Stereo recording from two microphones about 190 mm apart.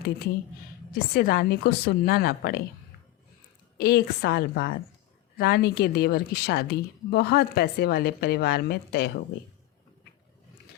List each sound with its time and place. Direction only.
0.9 s a woman's voice: 55° left (ahead or behind)
3.8 s a woman's voice: 55° left (ahead or behind)